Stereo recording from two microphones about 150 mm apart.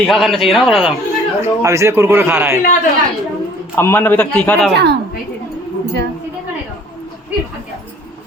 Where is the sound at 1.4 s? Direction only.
20° right (ahead or behind).